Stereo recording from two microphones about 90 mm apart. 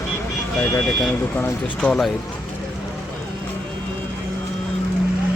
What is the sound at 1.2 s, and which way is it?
Speech, 20° left (ahead or behind).